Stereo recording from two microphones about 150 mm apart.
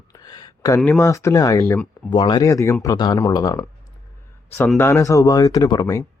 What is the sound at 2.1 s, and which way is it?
Speech, 30° left (ahead or behind).